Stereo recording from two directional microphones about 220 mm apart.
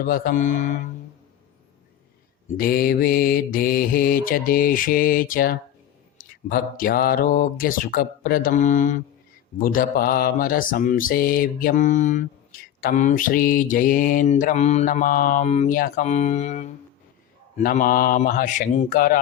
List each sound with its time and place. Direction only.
0.0 s mantra: 40° left (ahead or behind)
2.6 s mantra: 40° left (ahead or behind)